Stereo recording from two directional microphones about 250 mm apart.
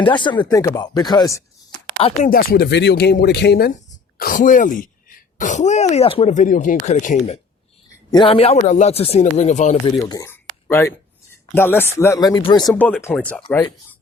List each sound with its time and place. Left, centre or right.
0.0 s speech: centre
2.3 s speech: left
8.1 s speech: left
10.1 s a sound: centre
11.5 s speech: centre